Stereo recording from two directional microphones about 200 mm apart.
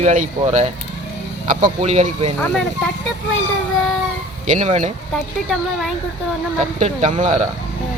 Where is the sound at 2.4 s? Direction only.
5° left (ahead or behind).